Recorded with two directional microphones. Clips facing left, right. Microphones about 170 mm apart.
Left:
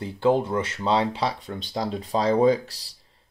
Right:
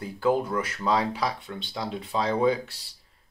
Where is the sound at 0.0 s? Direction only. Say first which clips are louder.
Left 3 dB; 25° left (ahead or behind).